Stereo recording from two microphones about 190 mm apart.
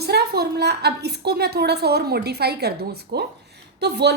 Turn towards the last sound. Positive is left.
turn(degrees=-60)  # may be behind; listen again after turning